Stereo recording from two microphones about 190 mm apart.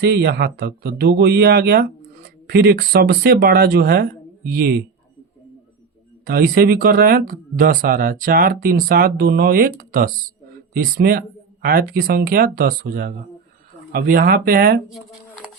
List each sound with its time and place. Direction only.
0.0 s speech: 55° right (ahead or behind)
6.2 s speech: 50° right (ahead or behind)
14.8 s a sound: centre (ahead or behind)